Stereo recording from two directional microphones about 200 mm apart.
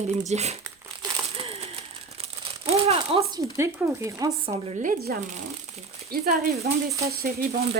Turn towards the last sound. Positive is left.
turn(degrees=-50)  # may be behind; listen again after turning